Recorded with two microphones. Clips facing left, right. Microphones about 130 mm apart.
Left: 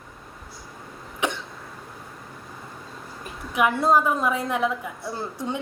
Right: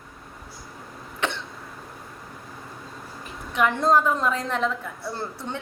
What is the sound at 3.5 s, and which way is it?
A woman's voice, 10° left (ahead or behind).